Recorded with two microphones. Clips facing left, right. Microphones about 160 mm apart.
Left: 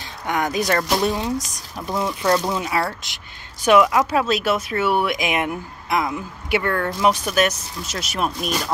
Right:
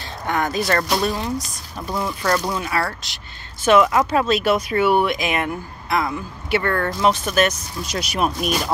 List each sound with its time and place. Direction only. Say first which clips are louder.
0.3 s speech: even; 15° left (ahead or behind); by 5.1 s centre (ahead or behind)
5.1 s speech: even; 15° left (ahead or behind); by 8.7 s 10° right (ahead or behind)